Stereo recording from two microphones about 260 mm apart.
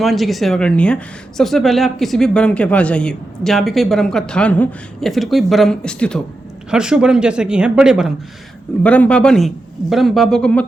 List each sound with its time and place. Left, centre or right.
0.0 s speech: centre